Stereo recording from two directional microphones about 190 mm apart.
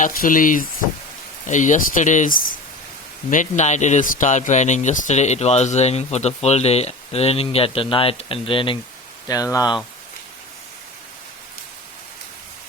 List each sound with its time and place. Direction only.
0.0 s a man's voice: 45° left (ahead or behind); by 9.8 s 20° left (ahead or behind)